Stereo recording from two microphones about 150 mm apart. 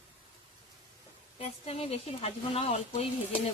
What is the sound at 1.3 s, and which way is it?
Speech, 40° left (ahead or behind).